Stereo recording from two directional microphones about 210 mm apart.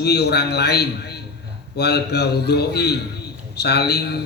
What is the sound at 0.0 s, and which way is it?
A man's voice, 50° left (ahead or behind).